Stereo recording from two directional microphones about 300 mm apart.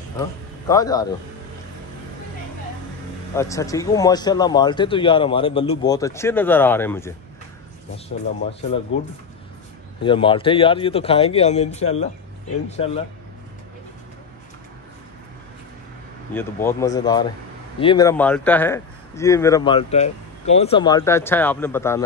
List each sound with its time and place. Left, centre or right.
0.7 s speech: centre
3.3 s speech: centre
10.0 s a man's voice: centre
16.3 s speech: centre